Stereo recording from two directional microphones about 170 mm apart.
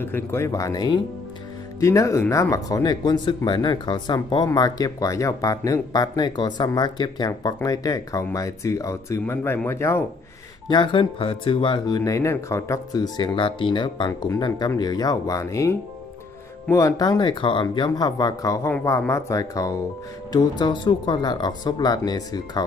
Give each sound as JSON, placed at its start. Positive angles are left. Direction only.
{"t": 0.0, "sound": "speech", "side_deg": 15}
{"t": 10.7, "sound": "speech", "side_deg": 30}